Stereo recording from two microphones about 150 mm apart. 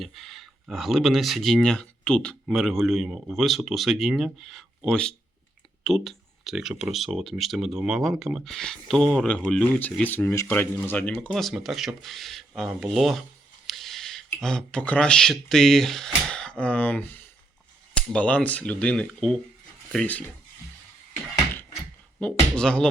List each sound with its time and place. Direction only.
0.0 s speech: centre (ahead or behind)
22.2 s speech: 5° left (ahead or behind)